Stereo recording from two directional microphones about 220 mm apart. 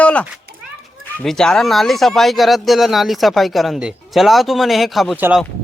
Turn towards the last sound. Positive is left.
turn(degrees=0)  # may be behind; listen again after turning